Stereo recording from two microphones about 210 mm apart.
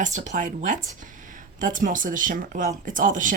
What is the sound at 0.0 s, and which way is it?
Speech, 35° right (ahead or behind).